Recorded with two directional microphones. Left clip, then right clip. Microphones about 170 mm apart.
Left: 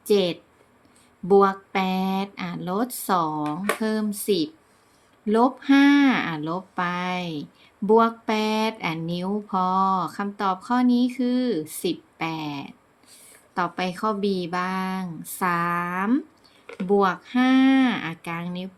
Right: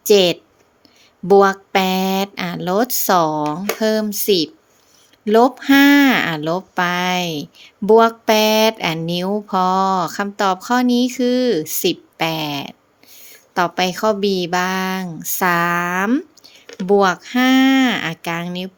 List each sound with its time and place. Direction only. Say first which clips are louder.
0.0 s speech: right 9 dB; 45° right (ahead or behind)